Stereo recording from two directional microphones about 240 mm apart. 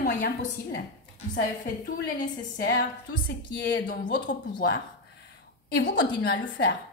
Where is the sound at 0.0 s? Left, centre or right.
Left.